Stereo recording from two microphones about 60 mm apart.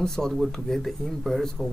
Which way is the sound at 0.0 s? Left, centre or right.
Centre.